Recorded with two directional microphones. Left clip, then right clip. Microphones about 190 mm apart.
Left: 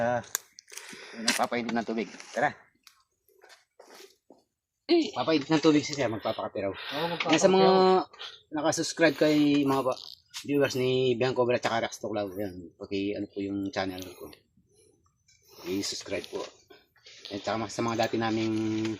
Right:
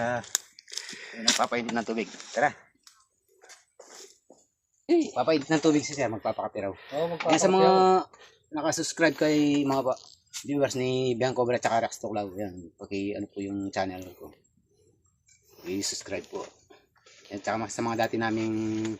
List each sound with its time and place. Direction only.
0.7 s wheeze: 5° right (ahead or behind)
0.9 s a sound: 15° left (ahead or behind)
1.2 s speech: centre (ahead or behind)
4.9 s speech: 40° right (ahead or behind)
5.1 s speech: 15° right (ahead or behind)
5.5 s speech: centre (ahead or behind)
7.3 s speech: 25° left (ahead or behind)
8.1 s speech: centre (ahead or behind); by 9.9 s 15° right (ahead or behind)
9.9 s a sound: 5° right (ahead or behind)
10.8 s speech: 15° right (ahead or behind)
15.4 s speech: centre (ahead or behind)